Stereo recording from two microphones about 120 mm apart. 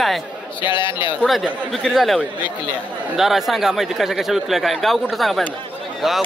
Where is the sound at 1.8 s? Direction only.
Centre (ahead or behind).